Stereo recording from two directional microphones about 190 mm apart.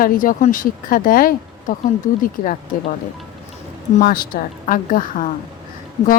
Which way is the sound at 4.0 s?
50° left (ahead or behind).